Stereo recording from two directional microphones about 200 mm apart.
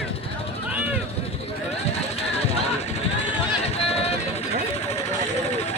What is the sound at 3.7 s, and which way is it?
Music, 30° left (ahead or behind).